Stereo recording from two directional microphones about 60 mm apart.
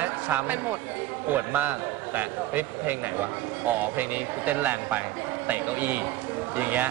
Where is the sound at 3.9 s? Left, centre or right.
Right.